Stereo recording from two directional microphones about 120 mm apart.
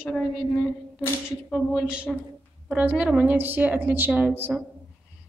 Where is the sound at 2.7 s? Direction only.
10° right (ahead or behind).